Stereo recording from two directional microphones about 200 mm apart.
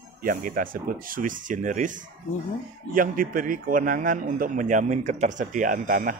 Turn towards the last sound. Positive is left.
turn(degrees=-45)  # may be behind; listen again after turning